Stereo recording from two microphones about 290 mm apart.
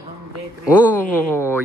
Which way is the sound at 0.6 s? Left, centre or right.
Centre.